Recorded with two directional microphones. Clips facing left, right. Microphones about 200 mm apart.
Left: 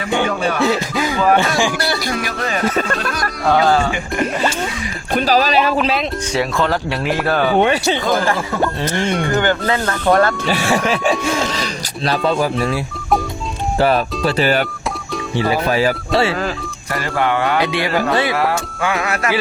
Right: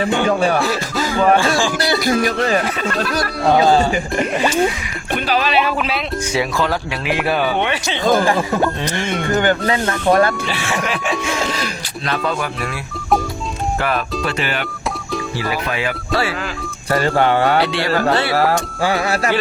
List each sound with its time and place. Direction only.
0.6 s music: 15° left (ahead or behind)
3.4 s speech: 20° right (ahead or behind)
5.1 s speech: 40° left (ahead or behind)
6.3 s speech: centre (ahead or behind)
7.2 s speech: 10° right (ahead or behind)
7.6 s speech: 40° left (ahead or behind)
8.2 s speech: 15° right (ahead or behind)
10.5 s speech: 40° left (ahead or behind)
12.2 s speech: 30° left (ahead or behind)
13.7 s speech: 30° left (ahead or behind)
16.9 s speech: 30° right (ahead or behind)
17.6 s speech: 15° left (ahead or behind)
18.3 s speech: 35° right (ahead or behind)